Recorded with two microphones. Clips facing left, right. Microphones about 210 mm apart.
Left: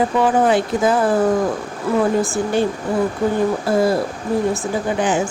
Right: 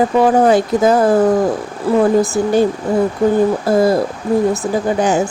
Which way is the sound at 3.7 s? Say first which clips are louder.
Right 4 dB; 40° right (ahead or behind).